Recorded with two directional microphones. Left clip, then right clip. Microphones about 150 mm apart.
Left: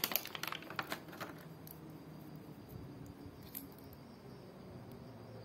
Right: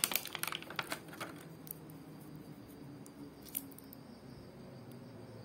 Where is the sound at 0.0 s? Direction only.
20° right (ahead or behind).